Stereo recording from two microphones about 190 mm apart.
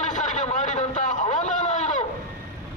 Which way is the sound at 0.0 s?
40° left (ahead or behind).